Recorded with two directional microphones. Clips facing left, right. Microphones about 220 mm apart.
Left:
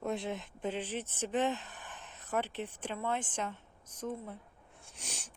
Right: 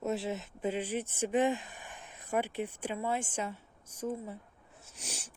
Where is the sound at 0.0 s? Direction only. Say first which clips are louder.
Right 2 dB; 5° right (ahead or behind).